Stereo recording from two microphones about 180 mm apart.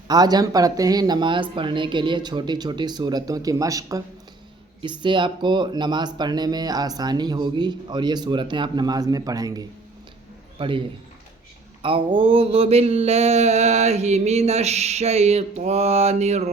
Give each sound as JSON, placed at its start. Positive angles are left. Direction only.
{"t": 0.1, "sound": "speech", "side_deg": -20}
{"t": 11.8, "sound": "mantra", "side_deg": -30}